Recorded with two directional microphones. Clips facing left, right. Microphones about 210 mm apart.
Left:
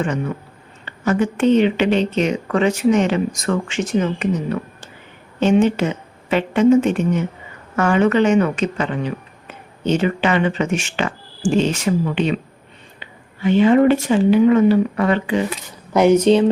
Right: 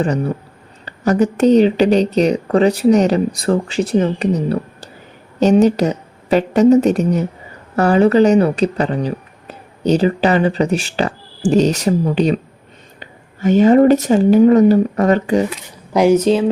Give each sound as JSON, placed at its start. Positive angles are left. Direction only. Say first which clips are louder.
{"t": 0.0, "sound": "speech", "louder": "right 4 dB", "side_deg": -35}
{"t": 15.9, "sound": "speech", "louder": "even", "side_deg": -10}